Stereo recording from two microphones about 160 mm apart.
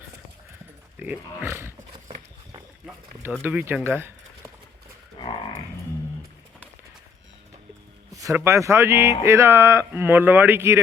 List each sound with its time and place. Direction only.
0.9 s a sound: 10° right (ahead or behind)
3.4 s speech: 15° right (ahead or behind)
5.2 s livestock: 30° left (ahead or behind)
8.1 s speech: 20° right (ahead or behind)